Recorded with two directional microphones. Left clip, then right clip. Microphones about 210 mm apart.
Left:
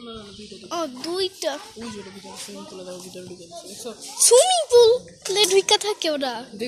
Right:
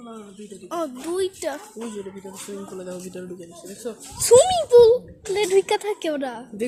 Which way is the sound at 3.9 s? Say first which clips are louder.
Right 5 dB; 40° right (ahead or behind).